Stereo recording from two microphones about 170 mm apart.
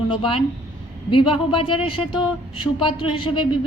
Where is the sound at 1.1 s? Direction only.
30° left (ahead or behind).